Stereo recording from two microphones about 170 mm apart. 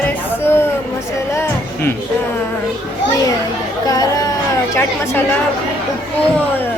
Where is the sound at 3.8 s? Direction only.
20° left (ahead or behind).